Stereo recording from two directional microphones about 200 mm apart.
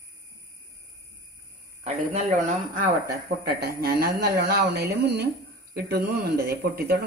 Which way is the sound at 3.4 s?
50° right (ahead or behind).